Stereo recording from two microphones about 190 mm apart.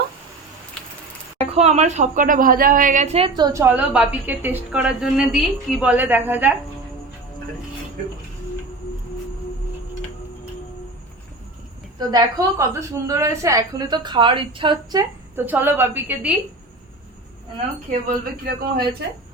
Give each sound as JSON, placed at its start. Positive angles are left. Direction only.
{"t": 1.5, "sound": "a woman's voice", "side_deg": -35}
{"t": 3.7, "sound": "a woman's voice", "side_deg": -5}
{"t": 11.9, "sound": "a woman's voice", "side_deg": -20}
{"t": 15.4, "sound": "a woman's voice", "side_deg": -10}
{"t": 17.9, "sound": "speech", "side_deg": -45}